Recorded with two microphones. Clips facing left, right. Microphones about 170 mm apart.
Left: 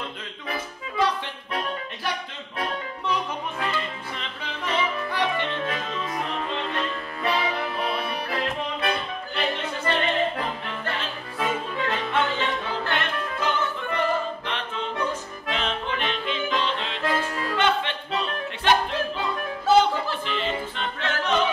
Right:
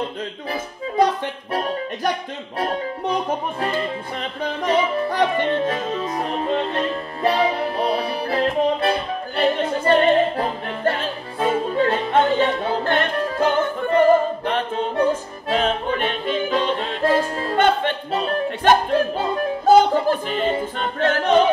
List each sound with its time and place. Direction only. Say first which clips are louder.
0.5 s music: right 2 dB; 45° right (ahead or behind)
4.9 s music: right 7 dB; 35° right (ahead or behind)
17.6 s music: right 6 dB; 45° right (ahead or behind)